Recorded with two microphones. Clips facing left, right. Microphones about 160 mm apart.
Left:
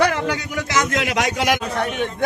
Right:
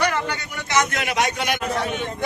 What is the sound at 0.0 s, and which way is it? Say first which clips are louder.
A man's voice: left 4 dB; 90° left.